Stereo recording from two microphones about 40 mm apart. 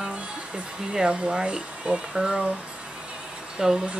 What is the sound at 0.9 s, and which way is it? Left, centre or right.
Speech, right.